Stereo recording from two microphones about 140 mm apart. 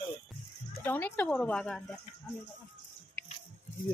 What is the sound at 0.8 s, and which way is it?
Speech, 15° left (ahead or behind).